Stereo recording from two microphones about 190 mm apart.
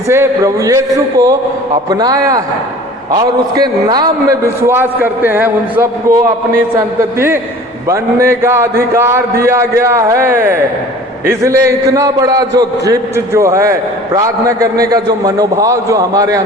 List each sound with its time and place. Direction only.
0.1 s a man's voice: 15° right (ahead or behind)